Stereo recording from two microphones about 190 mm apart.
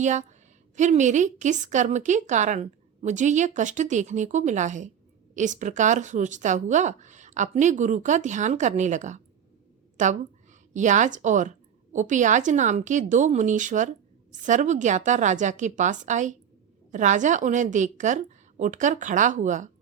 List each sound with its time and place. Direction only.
0.0 s a woman's voice: 40° right (ahead or behind)